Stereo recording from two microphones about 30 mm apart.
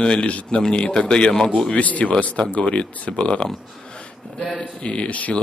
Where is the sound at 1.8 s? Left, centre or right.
Left.